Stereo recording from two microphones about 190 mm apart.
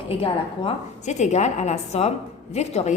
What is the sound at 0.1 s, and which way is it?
A woman's voice, 30° left (ahead or behind).